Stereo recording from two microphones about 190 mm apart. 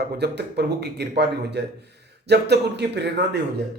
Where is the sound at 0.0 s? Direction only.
60° right (ahead or behind).